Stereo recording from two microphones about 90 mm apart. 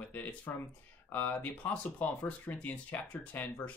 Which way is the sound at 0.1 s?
20° left (ahead or behind).